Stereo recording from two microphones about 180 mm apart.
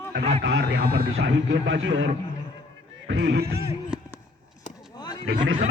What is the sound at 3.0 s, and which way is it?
Music, 70° right (ahead or behind).